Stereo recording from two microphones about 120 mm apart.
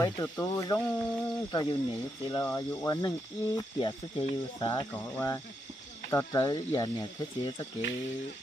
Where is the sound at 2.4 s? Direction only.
20° left (ahead or behind).